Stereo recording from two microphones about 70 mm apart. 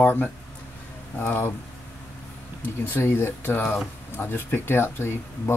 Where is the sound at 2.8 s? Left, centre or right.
Left.